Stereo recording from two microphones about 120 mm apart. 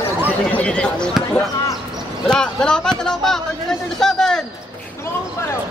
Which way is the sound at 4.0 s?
5° left (ahead or behind).